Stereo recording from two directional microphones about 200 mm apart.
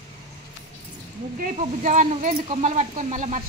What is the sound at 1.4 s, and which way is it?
Speech, 40° right (ahead or behind).